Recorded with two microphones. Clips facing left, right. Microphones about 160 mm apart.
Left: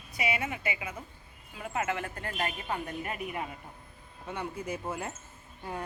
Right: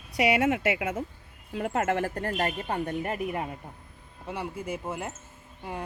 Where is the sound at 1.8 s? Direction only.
50° right (ahead or behind).